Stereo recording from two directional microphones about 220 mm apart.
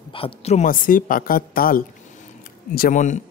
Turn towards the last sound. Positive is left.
turn(degrees=35)  # may be behind; listen again after turning